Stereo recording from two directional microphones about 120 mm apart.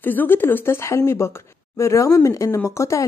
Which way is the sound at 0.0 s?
15° left (ahead or behind).